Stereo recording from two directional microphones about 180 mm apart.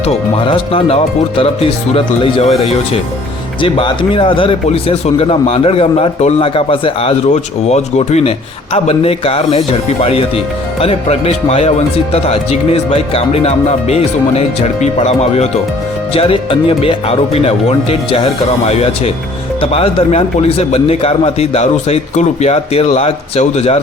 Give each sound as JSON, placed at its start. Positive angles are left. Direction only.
{"t": 0.0, "sound": "a man's voice", "side_deg": 30}